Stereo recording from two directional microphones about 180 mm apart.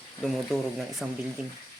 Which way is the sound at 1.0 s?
Centre (ahead or behind).